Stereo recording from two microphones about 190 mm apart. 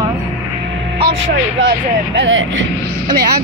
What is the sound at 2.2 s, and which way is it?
Speech, 90° right.